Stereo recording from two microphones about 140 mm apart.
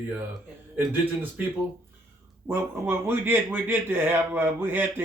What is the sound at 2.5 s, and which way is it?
A man's voice, 15° right (ahead or behind).